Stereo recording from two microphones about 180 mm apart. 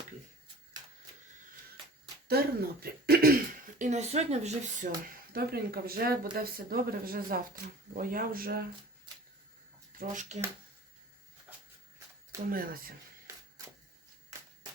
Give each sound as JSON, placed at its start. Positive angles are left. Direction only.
{"t": 2.2, "sound": "speech", "side_deg": -60}
{"t": 3.8, "sound": "speech", "side_deg": -40}
{"t": 5.3, "sound": "speech", "side_deg": -55}
{"t": 10.0, "sound": "speech", "side_deg": -40}
{"t": 12.5, "sound": "speech", "side_deg": -50}